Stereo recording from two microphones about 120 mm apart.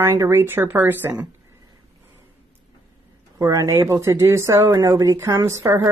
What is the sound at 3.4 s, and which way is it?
Speech, 25° right (ahead or behind).